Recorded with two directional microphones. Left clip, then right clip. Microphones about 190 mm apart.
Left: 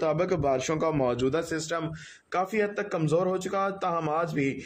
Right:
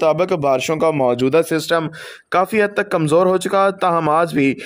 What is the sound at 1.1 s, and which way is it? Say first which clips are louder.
Speech: right 12 dB; 45° right (ahead or behind).